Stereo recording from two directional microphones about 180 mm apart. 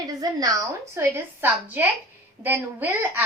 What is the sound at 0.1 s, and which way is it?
A woman's voice, 20° right (ahead or behind).